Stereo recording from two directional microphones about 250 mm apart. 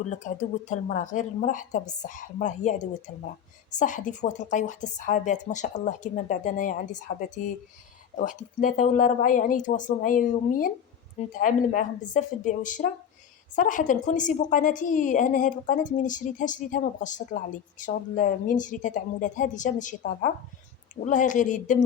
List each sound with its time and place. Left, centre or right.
0.1 s a woman's voice: left